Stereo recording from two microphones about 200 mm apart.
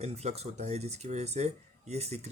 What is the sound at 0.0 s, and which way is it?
Speech, 30° right (ahead or behind).